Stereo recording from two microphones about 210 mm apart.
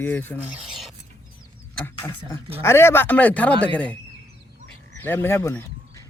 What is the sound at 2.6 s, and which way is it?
Speech, 10° left (ahead or behind).